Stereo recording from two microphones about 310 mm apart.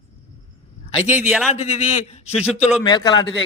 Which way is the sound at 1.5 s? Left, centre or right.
Left.